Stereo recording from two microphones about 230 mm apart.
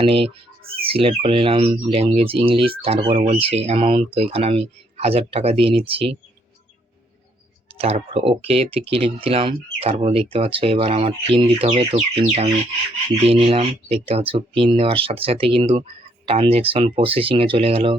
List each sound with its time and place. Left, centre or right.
0.0 s speech: right
7.8 s speech: right
13.2 s speech: right